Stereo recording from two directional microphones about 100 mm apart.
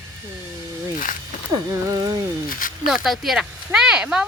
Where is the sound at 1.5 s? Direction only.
35° right (ahead or behind).